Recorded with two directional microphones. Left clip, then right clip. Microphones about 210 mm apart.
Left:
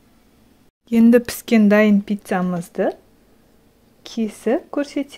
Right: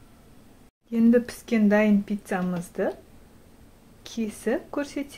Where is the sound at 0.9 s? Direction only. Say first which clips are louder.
Left 7 dB; 50° left (ahead or behind).